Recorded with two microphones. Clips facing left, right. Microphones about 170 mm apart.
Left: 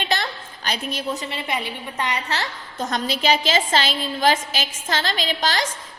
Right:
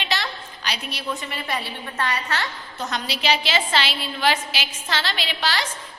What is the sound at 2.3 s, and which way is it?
A woman's voice, 40° left (ahead or behind).